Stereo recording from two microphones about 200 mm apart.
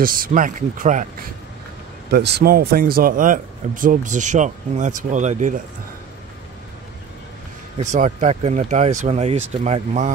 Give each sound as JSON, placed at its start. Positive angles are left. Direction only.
{"t": 0.0, "sound": "speech", "side_deg": -45}
{"t": 2.0, "sound": "speech", "side_deg": -55}
{"t": 7.7, "sound": "speech", "side_deg": -35}